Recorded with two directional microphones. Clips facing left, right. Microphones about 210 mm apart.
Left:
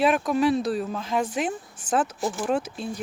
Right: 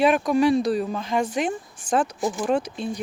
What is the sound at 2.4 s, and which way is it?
Speech, 5° left (ahead or behind).